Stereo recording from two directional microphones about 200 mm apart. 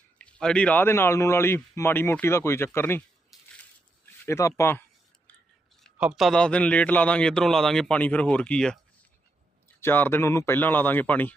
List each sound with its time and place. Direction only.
0.2 s speech: 5° left (ahead or behind)
3.3 s crushing: centre (ahead or behind)
4.3 s speech: 15° left (ahead or behind)
5.8 s a man's voice: centre (ahead or behind)
9.8 s speech: 10° left (ahead or behind)